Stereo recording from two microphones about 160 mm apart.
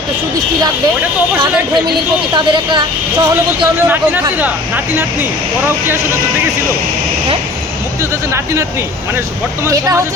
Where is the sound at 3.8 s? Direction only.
15° right (ahead or behind).